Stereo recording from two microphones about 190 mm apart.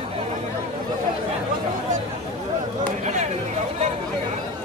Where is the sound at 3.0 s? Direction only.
35° right (ahead or behind).